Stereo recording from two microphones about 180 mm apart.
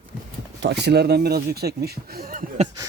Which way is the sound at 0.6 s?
70° right (ahead or behind).